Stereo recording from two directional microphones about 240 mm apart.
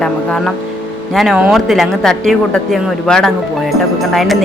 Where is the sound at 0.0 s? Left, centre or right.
Centre.